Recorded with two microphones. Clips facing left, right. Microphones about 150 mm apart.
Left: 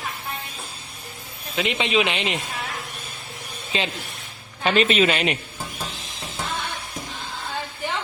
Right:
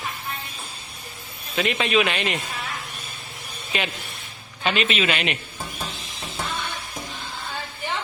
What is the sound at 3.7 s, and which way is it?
Speech, 25° left (ahead or behind).